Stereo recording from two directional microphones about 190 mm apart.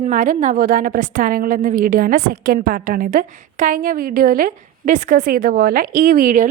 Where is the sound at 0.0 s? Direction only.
40° right (ahead or behind).